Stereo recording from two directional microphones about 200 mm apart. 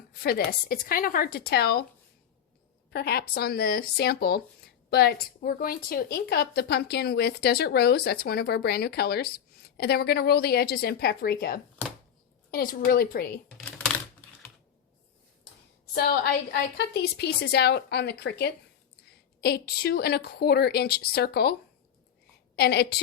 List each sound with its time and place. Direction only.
0.1 s speech: 50° left (ahead or behind)
2.9 s speech: 55° left (ahead or behind)
13.6 s computer keyboard: 5° left (ahead or behind)
16.0 s a woman's voice: 50° left (ahead or behind)
22.5 s a woman's voice: 55° left (ahead or behind)